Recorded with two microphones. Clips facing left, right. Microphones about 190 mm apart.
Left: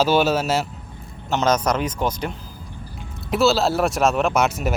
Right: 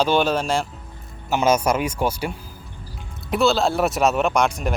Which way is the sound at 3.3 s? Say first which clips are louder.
Left 1 dB; centre (ahead or behind).